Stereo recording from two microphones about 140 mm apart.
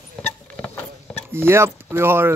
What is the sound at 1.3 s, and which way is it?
Speech, 15° right (ahead or behind).